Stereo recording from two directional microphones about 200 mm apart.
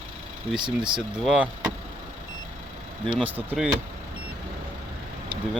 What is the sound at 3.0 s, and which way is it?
Speech, 25° right (ahead or behind).